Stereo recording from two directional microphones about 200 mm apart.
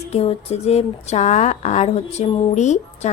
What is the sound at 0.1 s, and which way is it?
Speech, 30° left (ahead or behind).